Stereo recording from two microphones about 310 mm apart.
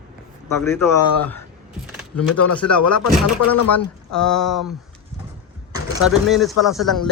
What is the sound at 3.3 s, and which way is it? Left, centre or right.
Speech, left.